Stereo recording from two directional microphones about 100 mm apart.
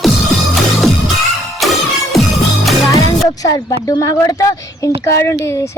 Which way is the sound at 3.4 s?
35° left (ahead or behind).